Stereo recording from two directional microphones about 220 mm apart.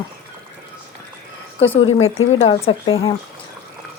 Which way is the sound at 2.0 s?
65° left (ahead or behind).